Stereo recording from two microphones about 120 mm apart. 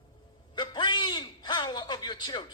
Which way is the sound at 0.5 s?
40° left (ahead or behind).